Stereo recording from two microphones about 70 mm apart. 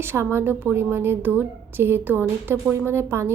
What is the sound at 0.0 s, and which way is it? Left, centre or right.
A woman's voice, right.